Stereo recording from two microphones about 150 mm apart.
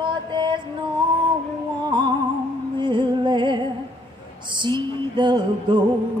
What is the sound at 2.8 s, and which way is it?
Music, 30° right (ahead or behind).